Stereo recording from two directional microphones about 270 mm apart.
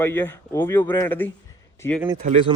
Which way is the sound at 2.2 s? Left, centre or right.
Right.